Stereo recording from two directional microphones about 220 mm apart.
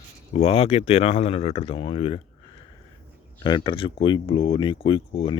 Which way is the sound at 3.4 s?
20° left (ahead or behind).